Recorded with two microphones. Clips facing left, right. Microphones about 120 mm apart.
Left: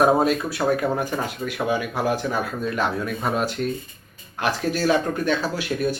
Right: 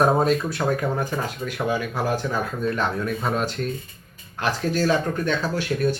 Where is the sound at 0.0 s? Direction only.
10° left (ahead or behind).